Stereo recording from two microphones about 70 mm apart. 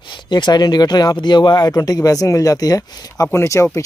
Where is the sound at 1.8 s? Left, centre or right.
Left.